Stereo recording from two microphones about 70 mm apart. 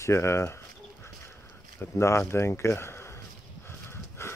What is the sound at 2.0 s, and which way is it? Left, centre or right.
Speech, left.